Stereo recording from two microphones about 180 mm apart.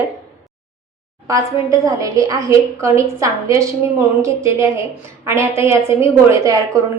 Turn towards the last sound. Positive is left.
turn(degrees=-15)  # may be behind; listen again after turning